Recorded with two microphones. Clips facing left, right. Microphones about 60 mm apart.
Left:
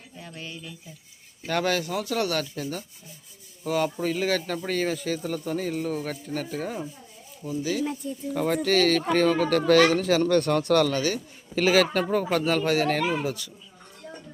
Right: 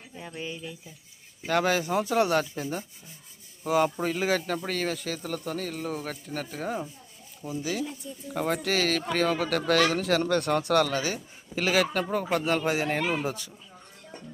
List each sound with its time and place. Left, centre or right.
0.2 s speech: centre
1.8 s speech: right
13.2 s speech: right